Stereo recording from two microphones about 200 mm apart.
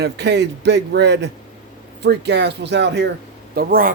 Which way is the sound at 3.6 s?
45° right (ahead or behind).